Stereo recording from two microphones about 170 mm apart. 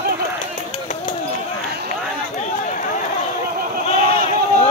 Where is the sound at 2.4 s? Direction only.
45° left (ahead or behind).